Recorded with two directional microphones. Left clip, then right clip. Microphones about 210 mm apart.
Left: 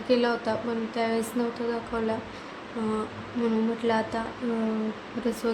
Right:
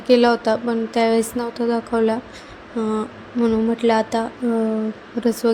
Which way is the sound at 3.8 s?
35° right (ahead or behind).